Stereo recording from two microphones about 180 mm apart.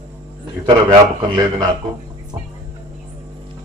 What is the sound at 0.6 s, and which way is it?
A man's voice, 25° right (ahead or behind).